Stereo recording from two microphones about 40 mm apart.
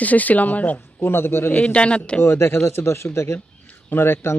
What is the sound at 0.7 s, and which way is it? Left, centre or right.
Speech, left.